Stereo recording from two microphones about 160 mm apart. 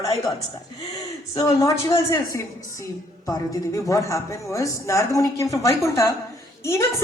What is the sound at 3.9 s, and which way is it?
A woman's voice, 20° left (ahead or behind).